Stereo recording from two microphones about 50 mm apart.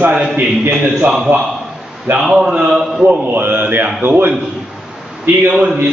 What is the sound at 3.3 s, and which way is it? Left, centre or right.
A man's voice, right.